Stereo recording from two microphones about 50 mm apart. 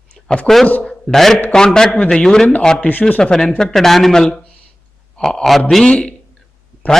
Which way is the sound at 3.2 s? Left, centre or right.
Centre.